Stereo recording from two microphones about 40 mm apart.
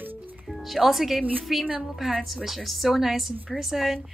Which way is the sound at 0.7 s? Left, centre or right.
Centre.